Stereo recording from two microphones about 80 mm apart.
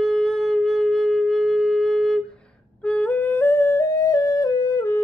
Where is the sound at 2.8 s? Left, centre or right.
Centre.